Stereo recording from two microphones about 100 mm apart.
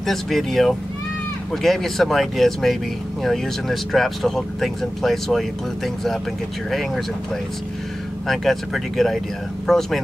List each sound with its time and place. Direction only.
0.0 s speech: centre (ahead or behind)
8.3 s speech: centre (ahead or behind)